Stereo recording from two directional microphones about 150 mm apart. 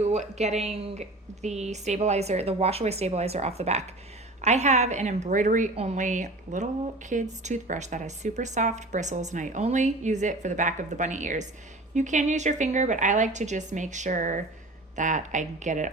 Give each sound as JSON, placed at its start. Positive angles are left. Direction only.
{"t": 0.0, "sound": "speech", "side_deg": -50}